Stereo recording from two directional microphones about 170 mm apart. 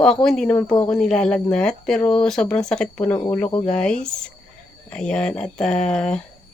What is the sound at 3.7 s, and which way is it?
Speech, 5° left (ahead or behind).